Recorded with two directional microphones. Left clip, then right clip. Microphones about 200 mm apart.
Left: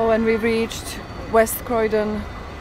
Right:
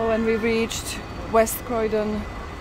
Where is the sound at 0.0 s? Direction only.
10° left (ahead or behind).